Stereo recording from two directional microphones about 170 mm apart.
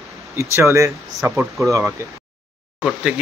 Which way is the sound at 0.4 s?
15° right (ahead or behind).